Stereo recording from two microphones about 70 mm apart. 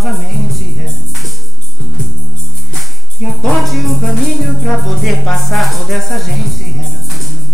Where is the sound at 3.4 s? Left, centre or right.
Centre.